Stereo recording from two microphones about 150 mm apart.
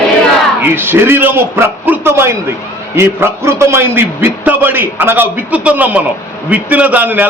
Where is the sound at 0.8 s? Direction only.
15° right (ahead or behind).